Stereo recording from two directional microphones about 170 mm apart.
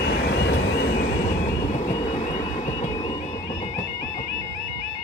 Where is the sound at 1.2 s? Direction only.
45° left (ahead or behind).